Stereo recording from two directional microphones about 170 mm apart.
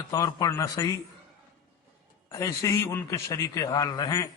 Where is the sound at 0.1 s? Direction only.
20° left (ahead or behind).